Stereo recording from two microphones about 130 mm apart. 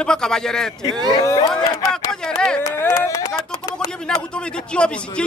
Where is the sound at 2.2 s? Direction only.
5° left (ahead or behind).